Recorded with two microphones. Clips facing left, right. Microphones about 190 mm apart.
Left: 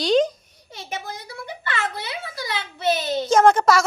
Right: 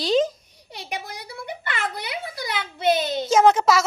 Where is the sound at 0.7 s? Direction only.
70° right (ahead or behind).